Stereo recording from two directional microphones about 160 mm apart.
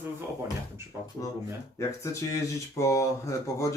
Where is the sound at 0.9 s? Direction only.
15° right (ahead or behind).